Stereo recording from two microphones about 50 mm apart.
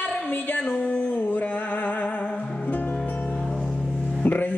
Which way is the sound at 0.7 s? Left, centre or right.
Left.